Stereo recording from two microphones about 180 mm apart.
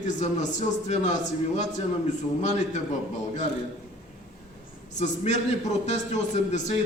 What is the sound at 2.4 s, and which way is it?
Speech, 40° left (ahead or behind).